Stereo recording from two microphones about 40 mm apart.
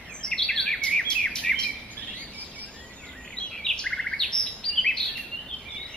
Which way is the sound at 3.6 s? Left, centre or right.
Left.